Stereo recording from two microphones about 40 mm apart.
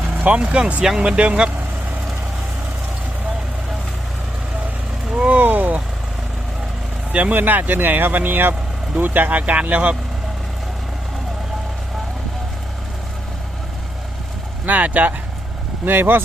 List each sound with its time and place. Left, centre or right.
0.3 s speech: right
5.1 s vehicle: right
5.4 s a sound: right
7.1 s speech: right
14.7 s speech: right
15.9 s speech: right